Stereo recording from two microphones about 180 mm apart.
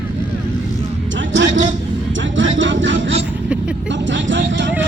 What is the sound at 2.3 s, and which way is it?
Music, 90° right.